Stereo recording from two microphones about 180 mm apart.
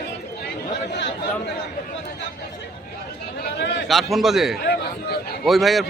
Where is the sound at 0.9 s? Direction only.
75° left (ahead or behind).